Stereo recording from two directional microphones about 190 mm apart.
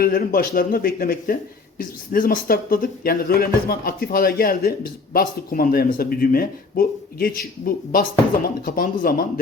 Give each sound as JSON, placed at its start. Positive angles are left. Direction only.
{"t": 0.0, "sound": "speech", "side_deg": 50}